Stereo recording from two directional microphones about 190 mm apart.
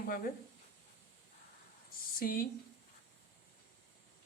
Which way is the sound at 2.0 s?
50° left (ahead or behind).